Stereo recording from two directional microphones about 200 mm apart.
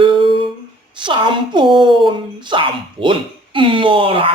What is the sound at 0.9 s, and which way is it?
A woman's voice, 25° right (ahead or behind).